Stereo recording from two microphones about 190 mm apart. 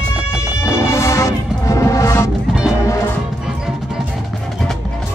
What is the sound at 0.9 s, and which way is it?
Music, 15° left (ahead or behind).